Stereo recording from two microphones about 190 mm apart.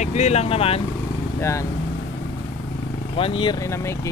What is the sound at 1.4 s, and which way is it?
Speech, 15° left (ahead or behind).